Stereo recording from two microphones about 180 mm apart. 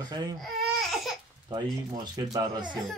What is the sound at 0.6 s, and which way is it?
Laughter, centre (ahead or behind).